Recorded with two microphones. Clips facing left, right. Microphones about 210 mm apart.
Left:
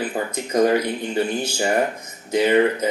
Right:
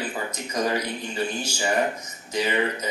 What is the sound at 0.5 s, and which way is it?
Speech, 55° left (ahead or behind).